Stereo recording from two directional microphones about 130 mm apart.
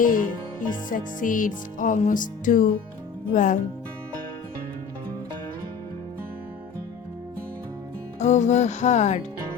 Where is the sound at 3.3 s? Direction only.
75° left (ahead or behind).